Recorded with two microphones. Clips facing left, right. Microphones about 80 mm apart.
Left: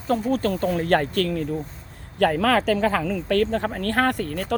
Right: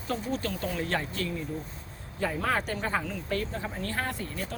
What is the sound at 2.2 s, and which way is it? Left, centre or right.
Speech, left.